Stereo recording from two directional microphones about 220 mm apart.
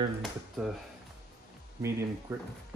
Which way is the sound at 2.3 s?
10° right (ahead or behind).